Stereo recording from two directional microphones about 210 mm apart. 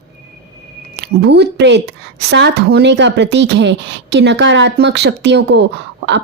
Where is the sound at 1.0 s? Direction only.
55° right (ahead or behind).